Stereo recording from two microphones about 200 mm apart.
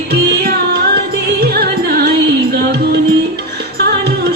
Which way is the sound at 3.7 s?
55° right (ahead or behind).